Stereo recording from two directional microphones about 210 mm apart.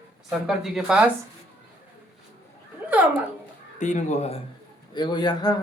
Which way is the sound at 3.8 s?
35° left (ahead or behind).